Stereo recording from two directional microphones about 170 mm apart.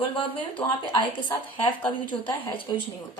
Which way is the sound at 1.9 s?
30° left (ahead or behind).